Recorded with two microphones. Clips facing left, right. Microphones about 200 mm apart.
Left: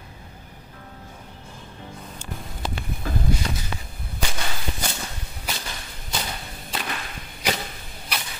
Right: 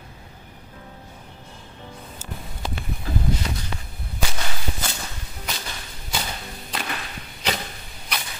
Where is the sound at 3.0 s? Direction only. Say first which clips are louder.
Right 1 dB; 50° left (ahead or behind).